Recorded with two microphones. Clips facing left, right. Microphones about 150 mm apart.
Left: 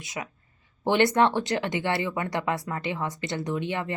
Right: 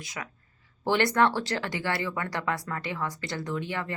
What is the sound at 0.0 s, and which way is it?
A woman's voice, 20° left (ahead or behind).